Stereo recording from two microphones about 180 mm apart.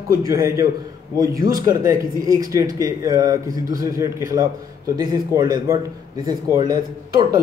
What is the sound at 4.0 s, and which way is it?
Speech, 15° right (ahead or behind).